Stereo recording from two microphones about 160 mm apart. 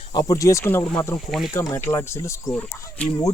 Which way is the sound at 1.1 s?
Centre (ahead or behind).